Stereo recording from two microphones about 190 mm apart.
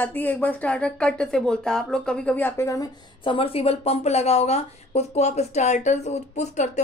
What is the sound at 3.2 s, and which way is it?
A woman's voice, 30° left (ahead or behind).